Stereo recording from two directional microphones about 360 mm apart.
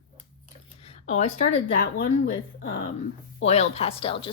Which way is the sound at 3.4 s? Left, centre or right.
Centre.